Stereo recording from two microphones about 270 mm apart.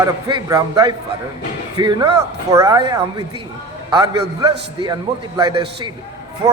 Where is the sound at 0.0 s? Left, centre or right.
Centre.